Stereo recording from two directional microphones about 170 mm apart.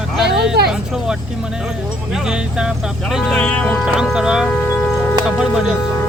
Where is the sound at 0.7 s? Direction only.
Centre (ahead or behind).